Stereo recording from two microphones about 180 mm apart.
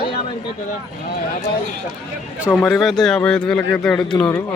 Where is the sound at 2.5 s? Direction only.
Centre (ahead or behind).